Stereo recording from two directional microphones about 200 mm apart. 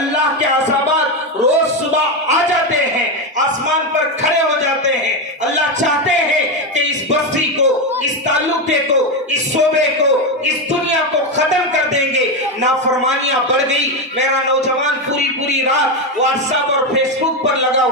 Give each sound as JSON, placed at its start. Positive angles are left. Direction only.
{"t": 7.1, "sound": "music", "side_deg": -35}
{"t": 10.0, "sound": "speech", "side_deg": -35}